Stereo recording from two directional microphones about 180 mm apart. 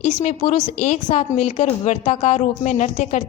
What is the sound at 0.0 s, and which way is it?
A woman's voice, 40° left (ahead or behind).